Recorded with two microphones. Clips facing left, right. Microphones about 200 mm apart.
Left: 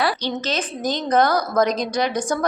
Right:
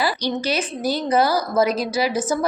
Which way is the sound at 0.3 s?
10° right (ahead or behind).